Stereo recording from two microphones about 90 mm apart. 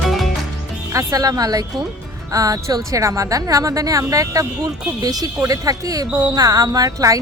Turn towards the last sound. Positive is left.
turn(degrees=-40)  # may be behind; listen again after turning